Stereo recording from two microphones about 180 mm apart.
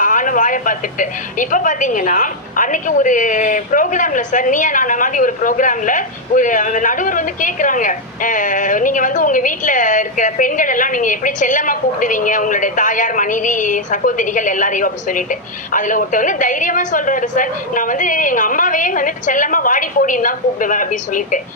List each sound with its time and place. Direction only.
0.0 s speech: 45° left (ahead or behind)